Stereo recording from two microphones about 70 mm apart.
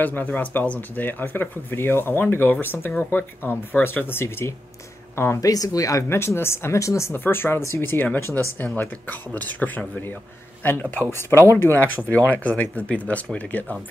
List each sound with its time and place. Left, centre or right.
0.0 s speech: left
5.4 s speech: left
6.0 s speech: left